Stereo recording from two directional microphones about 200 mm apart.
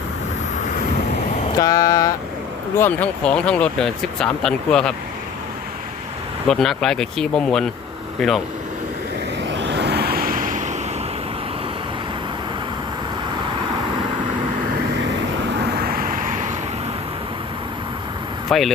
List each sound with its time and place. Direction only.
1.5 s mantra: 20° left (ahead or behind)
2.7 s speech: 10° left (ahead or behind)
6.5 s speech: centre (ahead or behind)
9.4 s vehicle: 60° right (ahead or behind); by 10.8 s 40° right (ahead or behind)
15.7 s vehicle: 50° right (ahead or behind)
18.4 s speech: centre (ahead or behind)